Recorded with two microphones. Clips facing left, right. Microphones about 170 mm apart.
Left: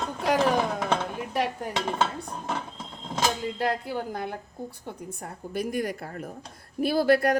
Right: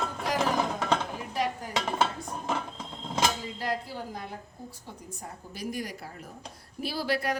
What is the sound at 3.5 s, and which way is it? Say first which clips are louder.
Speech: left 5 dB; 60° left (ahead or behind).